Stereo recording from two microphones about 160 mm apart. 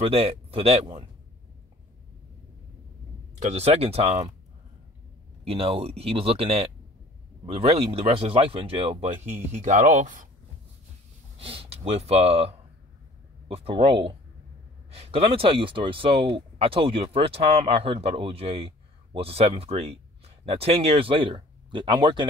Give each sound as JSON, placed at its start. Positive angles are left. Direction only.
{"t": 0.0, "sound": "speech", "side_deg": -35}
{"t": 3.3, "sound": "speech", "side_deg": -45}
{"t": 5.4, "sound": "speech", "side_deg": -35}
{"t": 11.3, "sound": "speech", "side_deg": -35}